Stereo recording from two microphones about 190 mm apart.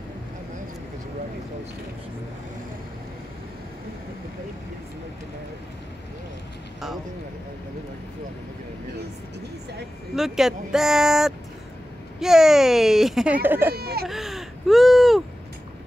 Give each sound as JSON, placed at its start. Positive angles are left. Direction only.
{"t": 10.1, "sound": "speech", "side_deg": 0}
{"t": 13.7, "sound": "baby cry", "side_deg": -55}
{"t": 14.0, "sound": "a sound", "side_deg": 0}